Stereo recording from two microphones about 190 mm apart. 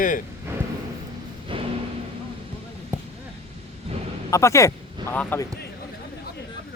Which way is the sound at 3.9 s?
30° right (ahead or behind).